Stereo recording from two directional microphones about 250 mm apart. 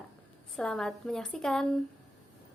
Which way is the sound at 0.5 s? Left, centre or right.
Centre.